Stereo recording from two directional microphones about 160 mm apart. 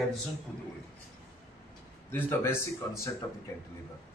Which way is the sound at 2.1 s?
15° left (ahead or behind).